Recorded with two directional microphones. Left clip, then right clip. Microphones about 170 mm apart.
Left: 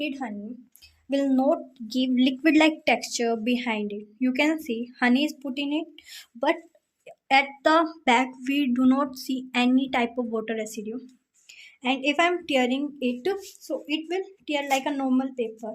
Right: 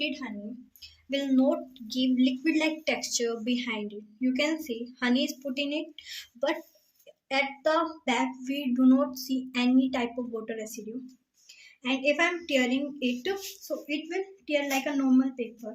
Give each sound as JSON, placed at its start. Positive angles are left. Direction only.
{"t": 0.0, "sound": "a woman's voice", "side_deg": 55}
{"t": 7.3, "sound": "speech", "side_deg": 90}
{"t": 11.8, "sound": "a woman's voice", "side_deg": 75}